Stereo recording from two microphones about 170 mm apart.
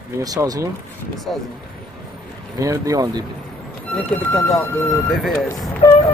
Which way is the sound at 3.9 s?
5° left (ahead or behind).